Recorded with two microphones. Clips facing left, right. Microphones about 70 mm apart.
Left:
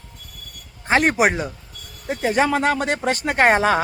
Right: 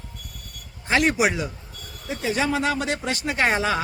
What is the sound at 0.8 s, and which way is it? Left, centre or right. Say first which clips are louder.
Speech: left 3 dB; left.